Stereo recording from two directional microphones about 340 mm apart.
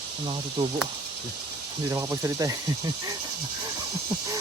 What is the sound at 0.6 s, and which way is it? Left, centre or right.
Speech, centre.